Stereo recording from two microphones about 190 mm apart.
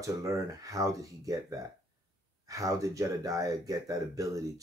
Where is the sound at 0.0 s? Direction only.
15° right (ahead or behind).